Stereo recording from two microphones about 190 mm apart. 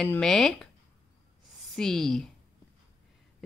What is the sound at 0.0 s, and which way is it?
Speech, 5° left (ahead or behind).